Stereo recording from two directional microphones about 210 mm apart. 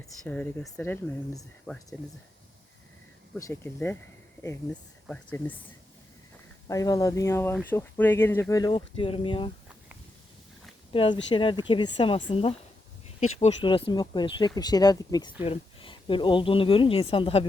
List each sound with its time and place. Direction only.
0.3 s speech: 5° left (ahead or behind)
3.3 s speech: 10° left (ahead or behind)
6.7 s speech: 15° left (ahead or behind)
10.9 s speech: 25° left (ahead or behind)